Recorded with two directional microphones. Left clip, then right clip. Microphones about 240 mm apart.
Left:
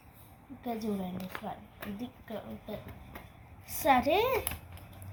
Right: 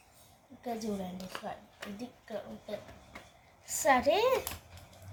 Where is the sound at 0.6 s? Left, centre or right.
Centre.